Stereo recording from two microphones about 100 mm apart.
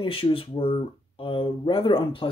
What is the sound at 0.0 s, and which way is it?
Speech, 65° left (ahead or behind).